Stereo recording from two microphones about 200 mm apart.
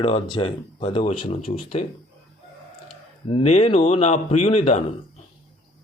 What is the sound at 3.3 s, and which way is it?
Speech, 30° left (ahead or behind).